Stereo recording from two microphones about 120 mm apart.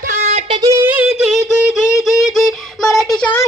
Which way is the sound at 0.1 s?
70° right (ahead or behind).